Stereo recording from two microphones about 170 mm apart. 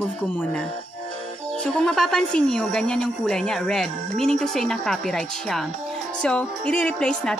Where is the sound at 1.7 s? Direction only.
5° left (ahead or behind).